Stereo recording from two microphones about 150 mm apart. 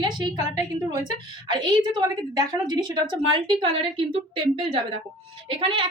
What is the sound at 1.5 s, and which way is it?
A woman's voice, 30° right (ahead or behind).